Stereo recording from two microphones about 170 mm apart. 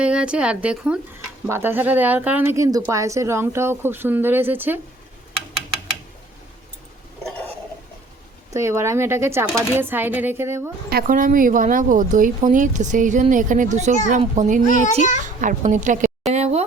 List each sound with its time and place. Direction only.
0.0 s speech: 5° right (ahead or behind)
8.5 s speech: 15° right (ahead or behind)
10.8 s speech: 60° right (ahead or behind)
14.7 s a child's voice: 50° left (ahead or behind)
15.4 s speech: 50° right (ahead or behind)
16.3 s a sound: 40° right (ahead or behind)